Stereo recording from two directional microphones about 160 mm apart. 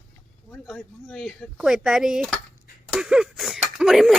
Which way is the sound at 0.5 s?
5° left (ahead or behind).